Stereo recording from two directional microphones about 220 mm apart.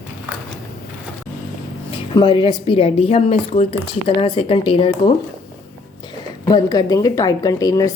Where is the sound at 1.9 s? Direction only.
25° left (ahead or behind).